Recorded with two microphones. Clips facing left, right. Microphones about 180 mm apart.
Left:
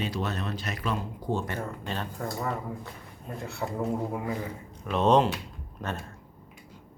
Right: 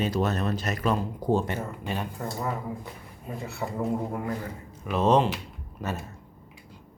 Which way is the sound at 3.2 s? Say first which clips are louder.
Right 1 dB; centre (ahead or behind).